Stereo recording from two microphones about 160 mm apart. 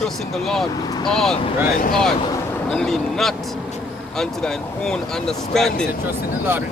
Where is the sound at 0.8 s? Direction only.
25° left (ahead or behind).